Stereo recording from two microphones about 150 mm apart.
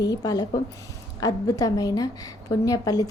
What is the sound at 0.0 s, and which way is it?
A woman's voice, 25° left (ahead or behind).